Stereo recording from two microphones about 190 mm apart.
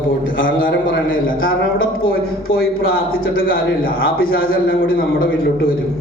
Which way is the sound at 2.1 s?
50° left (ahead or behind).